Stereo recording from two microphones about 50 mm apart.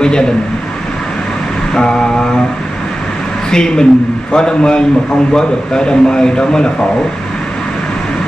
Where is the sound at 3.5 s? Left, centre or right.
Centre.